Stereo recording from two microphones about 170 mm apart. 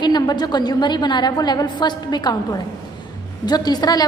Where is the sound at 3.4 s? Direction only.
25° left (ahead or behind).